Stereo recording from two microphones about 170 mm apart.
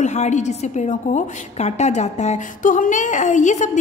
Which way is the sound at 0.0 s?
45° left (ahead or behind).